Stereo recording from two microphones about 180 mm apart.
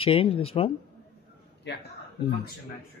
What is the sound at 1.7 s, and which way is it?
Speech, 70° left (ahead or behind).